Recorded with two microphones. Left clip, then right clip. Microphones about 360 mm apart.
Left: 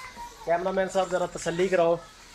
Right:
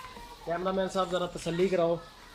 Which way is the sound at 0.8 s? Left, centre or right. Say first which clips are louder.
Left 4 dB; left.